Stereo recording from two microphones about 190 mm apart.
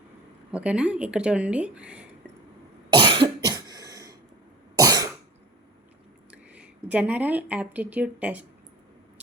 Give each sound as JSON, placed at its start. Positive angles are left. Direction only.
{"t": 0.5, "sound": "speech", "side_deg": -5}
{"t": 2.9, "sound": "cough", "side_deg": -25}
{"t": 6.3, "sound": "speech", "side_deg": -5}